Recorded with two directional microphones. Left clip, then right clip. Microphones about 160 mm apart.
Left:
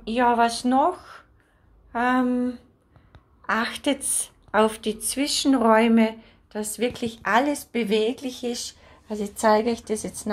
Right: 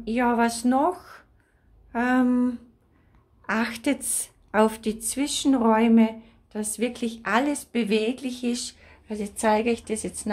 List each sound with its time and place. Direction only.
0.1 s a woman's voice: 25° right (ahead or behind)
1.9 s a sound: 30° right (ahead or behind)
3.4 s a woman's voice: 30° right (ahead or behind); by 10.3 s 15° right (ahead or behind)